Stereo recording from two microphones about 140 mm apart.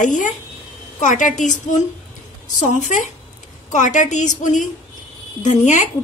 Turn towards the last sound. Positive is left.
turn(degrees=60)  # may be behind; listen again after turning